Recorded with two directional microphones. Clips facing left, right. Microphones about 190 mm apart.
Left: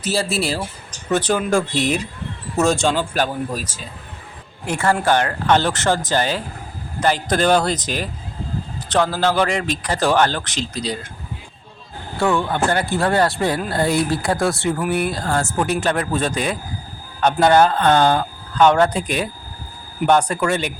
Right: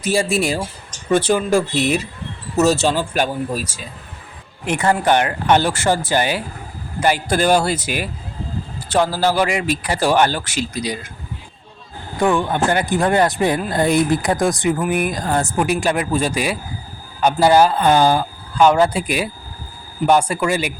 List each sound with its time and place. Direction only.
0.0 s speech: 15° right (ahead or behind)
12.1 s speech: 15° right (ahead or behind)